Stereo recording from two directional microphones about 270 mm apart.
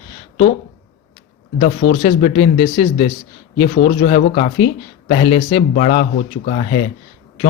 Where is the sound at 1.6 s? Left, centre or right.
Left.